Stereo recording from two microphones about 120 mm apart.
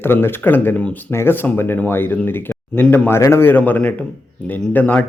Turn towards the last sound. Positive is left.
turn(degrees=15)  # may be behind; listen again after turning